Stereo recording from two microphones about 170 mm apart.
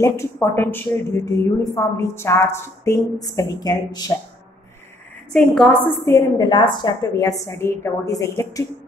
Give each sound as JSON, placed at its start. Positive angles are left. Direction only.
{"t": 0.0, "sound": "a woman's voice", "side_deg": 15}
{"t": 5.3, "sound": "a woman's voice", "side_deg": 5}
{"t": 6.0, "sound": "a woman's voice", "side_deg": 20}